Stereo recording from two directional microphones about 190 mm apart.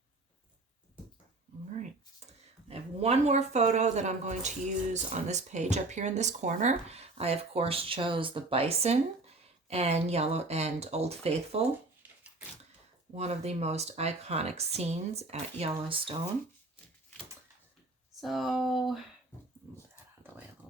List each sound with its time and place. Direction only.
2.6 s speech: 30° right (ahead or behind)
13.1 s speech: 35° right (ahead or behind)
18.1 s speech: centre (ahead or behind)